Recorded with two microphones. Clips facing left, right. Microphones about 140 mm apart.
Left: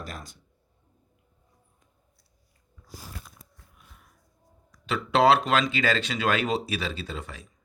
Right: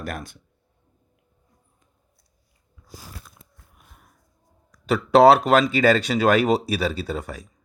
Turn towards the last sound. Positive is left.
turn(degrees=-40)  # may be behind; listen again after turning